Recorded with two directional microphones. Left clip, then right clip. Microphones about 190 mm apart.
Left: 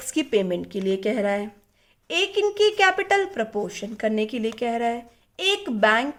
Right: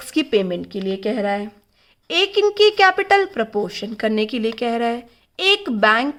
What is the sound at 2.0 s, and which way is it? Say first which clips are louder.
A woman's voice: right 5 dB; 20° right (ahead or behind).